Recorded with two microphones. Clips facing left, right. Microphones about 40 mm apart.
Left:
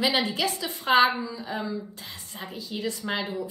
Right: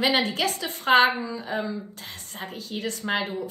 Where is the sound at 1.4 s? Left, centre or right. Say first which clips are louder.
Right 4 dB; right.